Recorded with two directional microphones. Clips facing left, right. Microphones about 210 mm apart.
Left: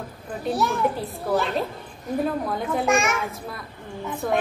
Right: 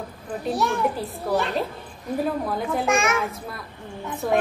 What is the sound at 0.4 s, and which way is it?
A child's voice, centre (ahead or behind).